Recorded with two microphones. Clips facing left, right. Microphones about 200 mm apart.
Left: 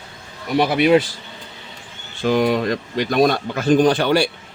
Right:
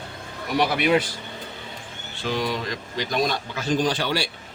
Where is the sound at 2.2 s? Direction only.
55° left (ahead or behind).